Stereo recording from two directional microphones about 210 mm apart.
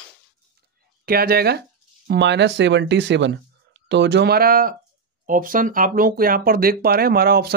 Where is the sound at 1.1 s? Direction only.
45° right (ahead or behind).